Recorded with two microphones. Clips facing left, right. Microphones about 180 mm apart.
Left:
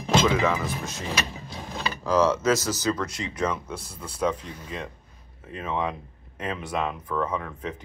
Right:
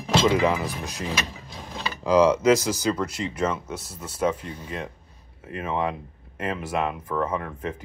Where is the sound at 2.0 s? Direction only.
15° right (ahead or behind).